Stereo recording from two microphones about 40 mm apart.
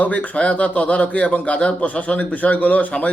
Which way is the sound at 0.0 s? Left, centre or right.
Left.